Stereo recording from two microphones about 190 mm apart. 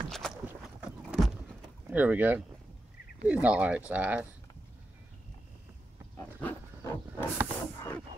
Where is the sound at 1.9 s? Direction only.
10° right (ahead or behind).